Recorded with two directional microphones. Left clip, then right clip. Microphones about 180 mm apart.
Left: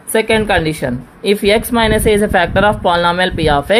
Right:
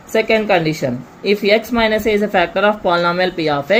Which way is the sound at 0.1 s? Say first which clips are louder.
Left 1 dB; 50° left (ahead or behind).